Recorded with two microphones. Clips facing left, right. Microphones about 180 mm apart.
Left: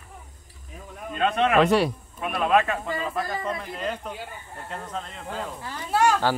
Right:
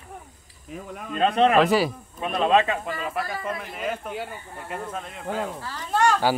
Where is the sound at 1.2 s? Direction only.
35° right (ahead or behind).